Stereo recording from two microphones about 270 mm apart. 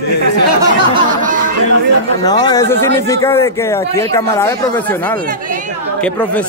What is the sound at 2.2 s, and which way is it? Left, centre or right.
A man's voice, centre.